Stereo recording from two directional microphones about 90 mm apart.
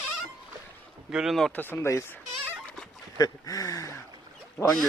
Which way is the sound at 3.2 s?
45° left (ahead or behind).